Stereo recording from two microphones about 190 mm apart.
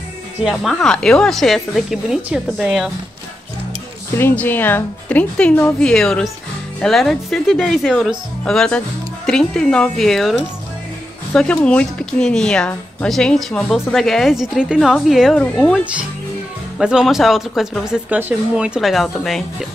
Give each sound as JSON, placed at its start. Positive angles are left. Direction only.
{"t": 0.4, "sound": "speech", "side_deg": 0}
{"t": 4.2, "sound": "speech", "side_deg": 10}